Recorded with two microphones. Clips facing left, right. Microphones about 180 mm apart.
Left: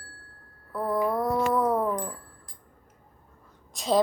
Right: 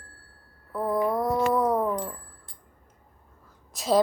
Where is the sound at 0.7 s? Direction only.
10° right (ahead or behind).